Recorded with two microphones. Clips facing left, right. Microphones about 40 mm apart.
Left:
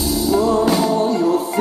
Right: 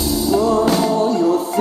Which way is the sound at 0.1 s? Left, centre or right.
Centre.